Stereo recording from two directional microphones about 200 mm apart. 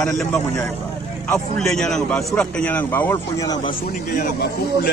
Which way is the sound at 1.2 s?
Centre (ahead or behind).